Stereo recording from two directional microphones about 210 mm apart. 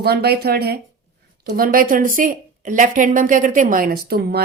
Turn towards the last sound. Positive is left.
turn(degrees=-45)  # may be behind; listen again after turning